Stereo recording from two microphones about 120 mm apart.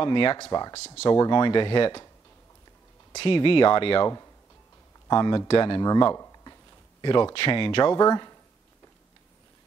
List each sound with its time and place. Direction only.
0.0 s speech: 45° left (ahead or behind)
3.2 s speech: 45° left (ahead or behind)
5.0 s speech: 35° left (ahead or behind)
5.5 s speech: 45° left (ahead or behind)
6.1 s a sound: 25° left (ahead or behind)
7.0 s speech: 40° left (ahead or behind)
8.0 s speech: 30° left (ahead or behind)